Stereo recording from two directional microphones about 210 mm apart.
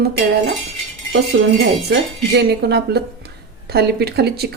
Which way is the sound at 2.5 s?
50° right (ahead or behind).